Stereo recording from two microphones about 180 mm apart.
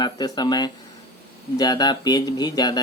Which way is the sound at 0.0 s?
25° left (ahead or behind).